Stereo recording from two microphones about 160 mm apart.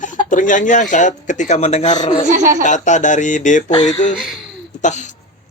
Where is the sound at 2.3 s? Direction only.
50° right (ahead or behind).